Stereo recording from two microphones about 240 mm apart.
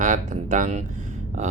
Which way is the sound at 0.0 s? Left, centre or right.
Right.